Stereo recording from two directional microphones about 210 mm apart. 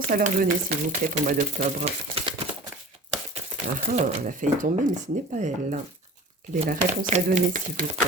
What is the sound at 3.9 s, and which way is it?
Speech, 35° right (ahead or behind).